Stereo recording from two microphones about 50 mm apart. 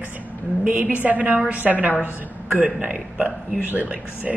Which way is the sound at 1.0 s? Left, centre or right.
Right.